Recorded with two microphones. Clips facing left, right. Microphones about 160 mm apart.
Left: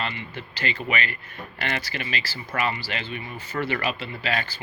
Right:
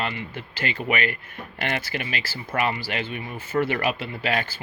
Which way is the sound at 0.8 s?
10° right (ahead or behind).